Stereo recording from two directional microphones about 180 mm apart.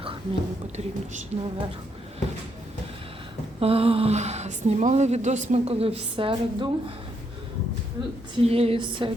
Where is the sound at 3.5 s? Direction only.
30° right (ahead or behind).